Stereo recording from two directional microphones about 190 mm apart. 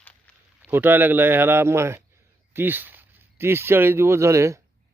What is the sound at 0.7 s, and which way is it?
Speech, 10° right (ahead or behind).